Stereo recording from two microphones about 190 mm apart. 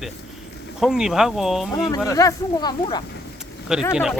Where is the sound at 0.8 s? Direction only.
5° right (ahead or behind).